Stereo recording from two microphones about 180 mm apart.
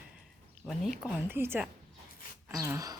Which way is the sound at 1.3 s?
10° right (ahead or behind).